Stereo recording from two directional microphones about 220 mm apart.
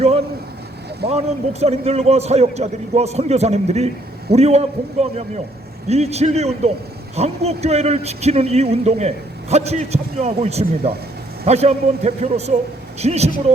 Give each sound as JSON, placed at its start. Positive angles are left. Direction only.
{"t": 1.0, "sound": "speech", "side_deg": -30}